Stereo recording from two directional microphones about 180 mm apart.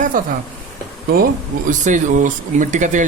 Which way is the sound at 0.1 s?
50° right (ahead or behind).